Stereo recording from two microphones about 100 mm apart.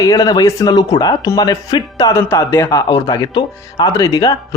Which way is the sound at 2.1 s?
25° left (ahead or behind).